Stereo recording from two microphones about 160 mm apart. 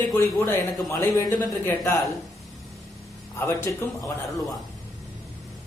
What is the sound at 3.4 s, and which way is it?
Speech, 15° left (ahead or behind).